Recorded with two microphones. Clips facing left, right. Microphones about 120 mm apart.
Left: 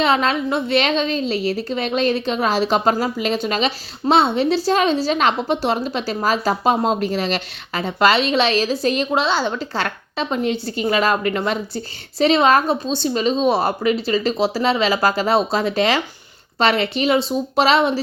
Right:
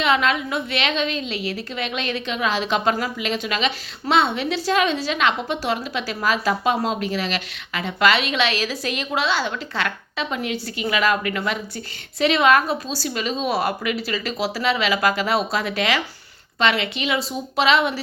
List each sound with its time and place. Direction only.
0.0 s a woman's voice: 35° left (ahead or behind)